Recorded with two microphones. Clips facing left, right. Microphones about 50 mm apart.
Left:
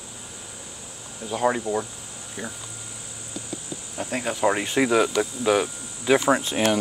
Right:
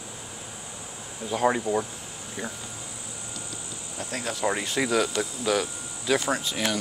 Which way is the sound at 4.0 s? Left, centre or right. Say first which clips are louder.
Left 5 dB; centre.